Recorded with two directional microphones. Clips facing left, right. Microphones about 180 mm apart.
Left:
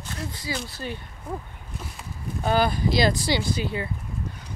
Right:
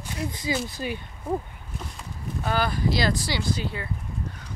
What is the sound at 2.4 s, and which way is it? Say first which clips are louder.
Speech: left 3 dB; 20° left (ahead or behind).